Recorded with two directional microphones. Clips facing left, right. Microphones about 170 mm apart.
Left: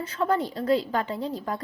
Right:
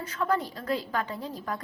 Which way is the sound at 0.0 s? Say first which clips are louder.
Left 3 dB; 25° left (ahead or behind).